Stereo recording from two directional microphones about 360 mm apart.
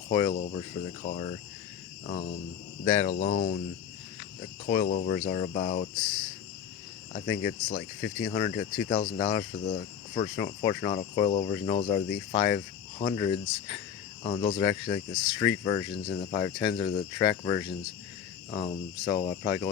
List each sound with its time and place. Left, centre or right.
0.1 s cricket: centre
4.6 s cricket: centre
7.1 s speech: centre